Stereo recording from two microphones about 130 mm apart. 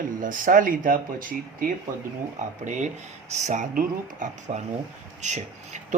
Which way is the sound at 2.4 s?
70° right (ahead or behind).